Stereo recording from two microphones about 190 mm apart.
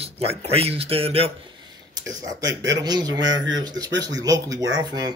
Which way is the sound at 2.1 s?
20° right (ahead or behind).